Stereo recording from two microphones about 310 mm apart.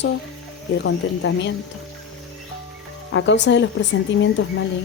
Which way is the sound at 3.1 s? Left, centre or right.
Left.